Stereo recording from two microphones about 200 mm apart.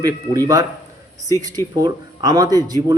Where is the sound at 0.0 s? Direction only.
20° right (ahead or behind).